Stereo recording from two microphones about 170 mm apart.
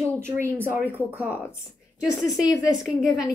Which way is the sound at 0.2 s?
15° right (ahead or behind).